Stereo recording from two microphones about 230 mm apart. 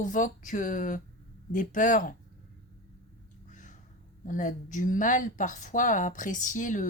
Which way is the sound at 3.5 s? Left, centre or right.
Left.